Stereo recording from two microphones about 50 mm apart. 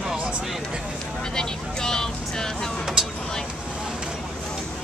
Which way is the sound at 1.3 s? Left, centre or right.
Centre.